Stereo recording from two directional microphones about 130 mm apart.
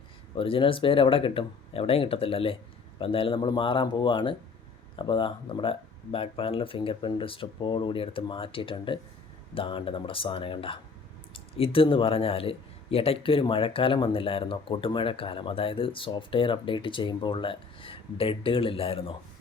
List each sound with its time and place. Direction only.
0.3 s a man's voice: 45° left (ahead or behind)